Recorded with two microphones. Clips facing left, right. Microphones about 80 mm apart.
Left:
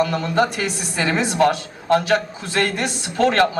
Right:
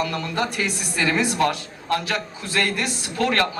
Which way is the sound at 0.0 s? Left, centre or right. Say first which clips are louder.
Left 6 dB; left.